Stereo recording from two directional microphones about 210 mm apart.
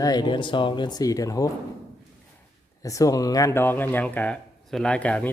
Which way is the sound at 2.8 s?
15° left (ahead or behind).